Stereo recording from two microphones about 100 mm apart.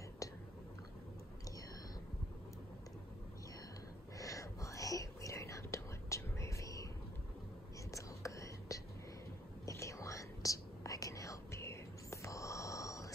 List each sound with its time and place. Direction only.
4.2 s whispering: 30° left (ahead or behind)
7.9 s whispering: 30° left (ahead or behind)